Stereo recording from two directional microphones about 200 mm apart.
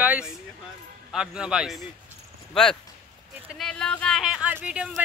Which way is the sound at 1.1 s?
5° right (ahead or behind).